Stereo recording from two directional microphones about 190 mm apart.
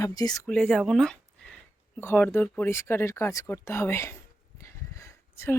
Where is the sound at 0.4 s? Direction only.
5° left (ahead or behind).